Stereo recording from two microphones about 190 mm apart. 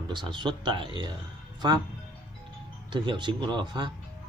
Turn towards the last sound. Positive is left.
turn(degrees=-25)  # may be behind; listen again after turning